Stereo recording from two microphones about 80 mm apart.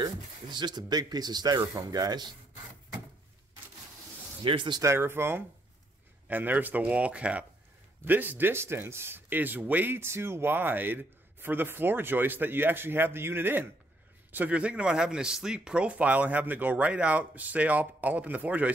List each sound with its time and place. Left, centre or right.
0.0 s speech: right
4.4 s speech: right
4.8 s speech: right